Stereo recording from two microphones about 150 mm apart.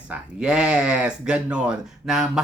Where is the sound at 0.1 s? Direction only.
5° right (ahead or behind).